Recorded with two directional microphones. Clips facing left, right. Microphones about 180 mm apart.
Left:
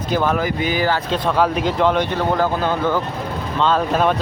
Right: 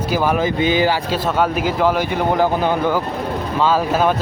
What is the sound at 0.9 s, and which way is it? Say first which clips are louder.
Speech: right 1 dB; 5° right (ahead or behind).